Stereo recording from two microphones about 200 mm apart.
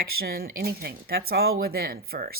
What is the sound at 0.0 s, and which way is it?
Speech, 50° right (ahead or behind).